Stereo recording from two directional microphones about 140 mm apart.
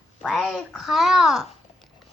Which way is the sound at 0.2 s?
Centre (ahead or behind).